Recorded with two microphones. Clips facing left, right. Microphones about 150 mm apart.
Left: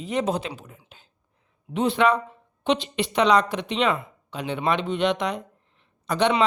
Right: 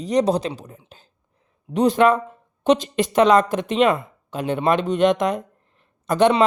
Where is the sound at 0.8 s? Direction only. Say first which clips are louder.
Right 5 dB; 40° right (ahead or behind).